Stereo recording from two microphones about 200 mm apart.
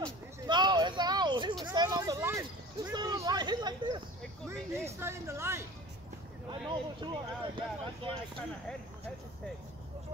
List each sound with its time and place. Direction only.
0.0 s a sound: 20° right (ahead or behind)
4.7 s hubbub: 15° right (ahead or behind)
6.5 s speech: 25° right (ahead or behind)